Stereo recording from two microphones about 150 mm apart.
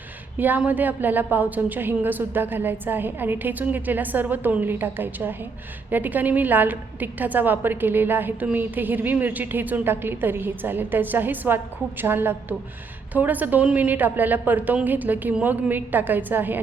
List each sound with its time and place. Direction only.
0.3 s a woman's voice: 10° right (ahead or behind)